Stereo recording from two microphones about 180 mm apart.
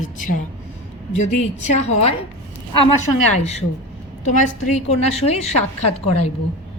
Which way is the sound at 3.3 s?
35° left (ahead or behind).